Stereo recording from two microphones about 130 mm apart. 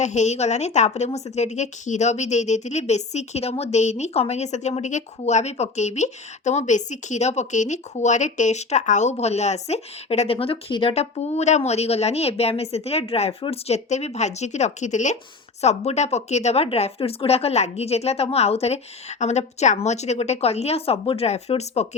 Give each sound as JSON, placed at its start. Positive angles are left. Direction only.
{"t": 0.0, "sound": "speech", "side_deg": 65}
{"t": 10.9, "sound": "speech", "side_deg": 55}